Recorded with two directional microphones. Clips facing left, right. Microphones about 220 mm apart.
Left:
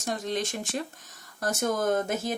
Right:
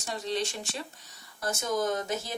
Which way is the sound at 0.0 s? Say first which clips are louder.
Left 2 dB; 50° left (ahead or behind).